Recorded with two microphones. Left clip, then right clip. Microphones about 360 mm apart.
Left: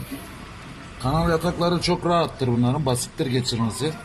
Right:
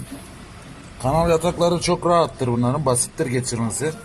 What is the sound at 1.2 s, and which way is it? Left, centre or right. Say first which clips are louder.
Speech: right 5 dB; right.